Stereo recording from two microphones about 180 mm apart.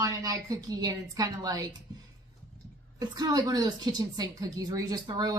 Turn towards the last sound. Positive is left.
turn(degrees=-20)  # may be behind; listen again after turning